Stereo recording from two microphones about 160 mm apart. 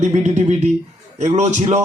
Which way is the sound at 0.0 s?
45° right (ahead or behind).